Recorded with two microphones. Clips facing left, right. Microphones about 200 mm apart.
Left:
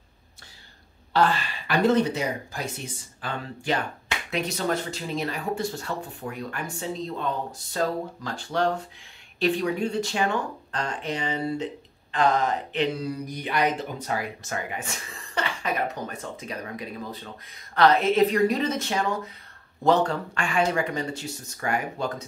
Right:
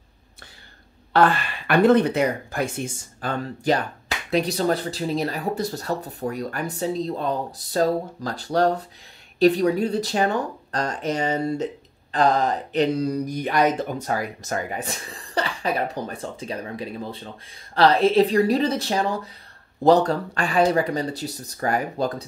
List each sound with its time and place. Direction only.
1.1 s speech: 55° right (ahead or behind); by 22.2 s 35° right (ahead or behind)